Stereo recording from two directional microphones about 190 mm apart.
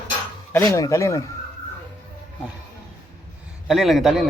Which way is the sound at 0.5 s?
15° left (ahead or behind).